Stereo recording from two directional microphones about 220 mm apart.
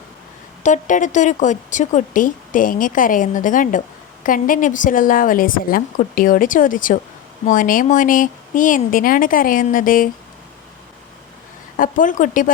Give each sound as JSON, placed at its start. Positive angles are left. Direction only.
{"t": 0.6, "sound": "a woman's voice", "side_deg": 35}
{"t": 11.8, "sound": "a woman's voice", "side_deg": 35}